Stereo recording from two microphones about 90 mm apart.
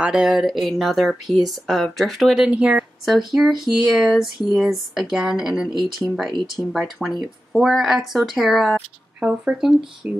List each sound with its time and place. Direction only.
0.0 s speech: 10° right (ahead or behind)
2.5 s speech: 10° right (ahead or behind)
3.1 s speech: centre (ahead or behind)
9.2 s speech: 15° right (ahead or behind)